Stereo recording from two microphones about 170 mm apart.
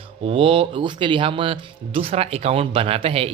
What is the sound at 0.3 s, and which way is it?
Speech, 30° right (ahead or behind).